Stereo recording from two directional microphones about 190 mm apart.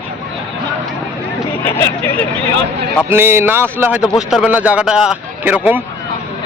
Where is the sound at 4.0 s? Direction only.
Centre (ahead or behind).